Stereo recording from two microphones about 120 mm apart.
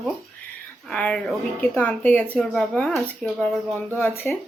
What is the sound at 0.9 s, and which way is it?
A woman's voice, 10° left (ahead or behind).